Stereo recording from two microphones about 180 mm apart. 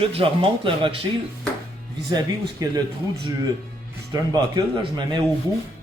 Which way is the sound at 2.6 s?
20° right (ahead or behind).